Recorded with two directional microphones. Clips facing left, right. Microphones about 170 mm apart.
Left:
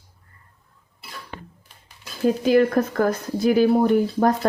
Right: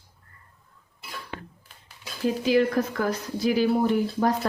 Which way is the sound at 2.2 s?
50° left (ahead or behind).